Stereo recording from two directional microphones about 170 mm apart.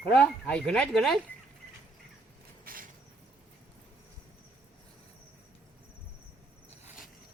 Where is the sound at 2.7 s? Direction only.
60° right (ahead or behind).